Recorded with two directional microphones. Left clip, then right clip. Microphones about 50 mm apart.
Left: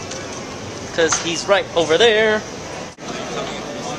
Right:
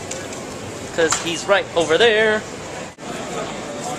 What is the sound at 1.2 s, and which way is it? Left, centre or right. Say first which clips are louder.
Speech: left 1 dB; left.